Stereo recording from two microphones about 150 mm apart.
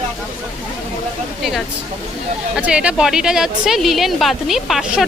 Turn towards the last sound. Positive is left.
turn(degrees=0)  # may be behind; listen again after turning